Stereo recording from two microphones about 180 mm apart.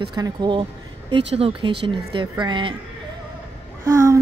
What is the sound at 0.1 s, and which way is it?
A woman's voice, 25° right (ahead or behind).